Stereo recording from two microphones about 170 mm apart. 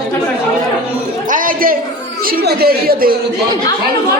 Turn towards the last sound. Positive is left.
turn(degrees=-60)  # may be behind; listen again after turning